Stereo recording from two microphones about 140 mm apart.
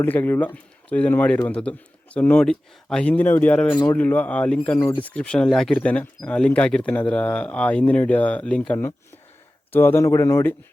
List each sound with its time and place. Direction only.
0.0 s speech: 15° left (ahead or behind)